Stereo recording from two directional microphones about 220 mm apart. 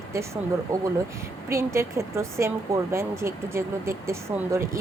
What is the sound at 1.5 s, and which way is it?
A woman's voice, 10° right (ahead or behind).